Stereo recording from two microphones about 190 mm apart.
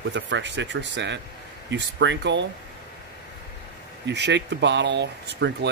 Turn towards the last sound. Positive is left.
turn(degrees=-60)  # may be behind; listen again after turning